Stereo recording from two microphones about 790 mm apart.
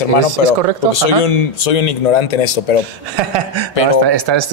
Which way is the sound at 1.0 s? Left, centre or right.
Left.